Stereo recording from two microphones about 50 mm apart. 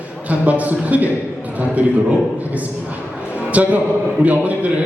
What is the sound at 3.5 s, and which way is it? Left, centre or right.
Speech, right.